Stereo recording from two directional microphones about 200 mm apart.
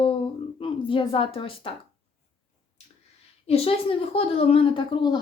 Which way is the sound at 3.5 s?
30° left (ahead or behind).